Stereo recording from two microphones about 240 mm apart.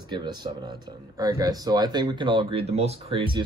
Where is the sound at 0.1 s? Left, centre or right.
Centre.